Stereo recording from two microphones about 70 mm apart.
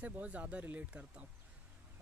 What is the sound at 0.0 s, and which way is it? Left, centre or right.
Speech, right.